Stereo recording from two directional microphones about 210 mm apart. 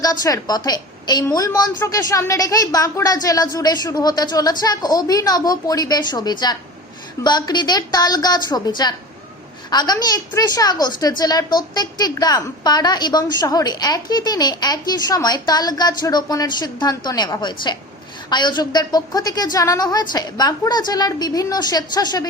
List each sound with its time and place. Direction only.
0.0 s a woman's voice: 15° left (ahead or behind)